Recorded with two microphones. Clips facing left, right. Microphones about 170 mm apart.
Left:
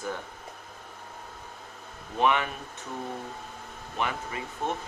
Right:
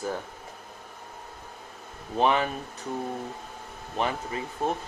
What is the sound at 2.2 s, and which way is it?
Speech, 35° right (ahead or behind).